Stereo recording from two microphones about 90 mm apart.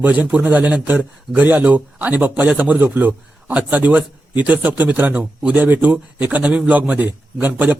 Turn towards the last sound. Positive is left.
turn(degrees=-20)  # may be behind; listen again after turning